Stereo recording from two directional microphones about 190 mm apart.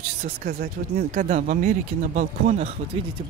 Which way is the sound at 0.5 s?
55° right (ahead or behind).